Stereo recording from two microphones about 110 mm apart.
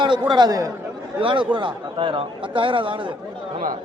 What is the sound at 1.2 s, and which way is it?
Speech, 50° right (ahead or behind).